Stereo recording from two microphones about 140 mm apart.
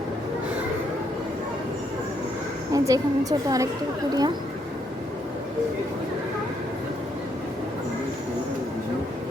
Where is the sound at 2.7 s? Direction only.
25° right (ahead or behind).